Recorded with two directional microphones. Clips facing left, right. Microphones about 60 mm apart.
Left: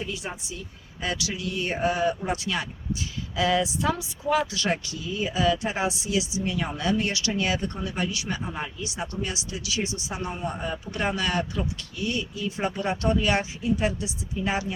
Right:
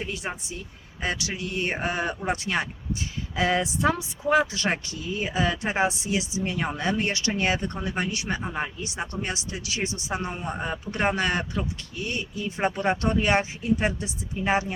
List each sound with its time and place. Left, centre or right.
0.0 s a man's voice: right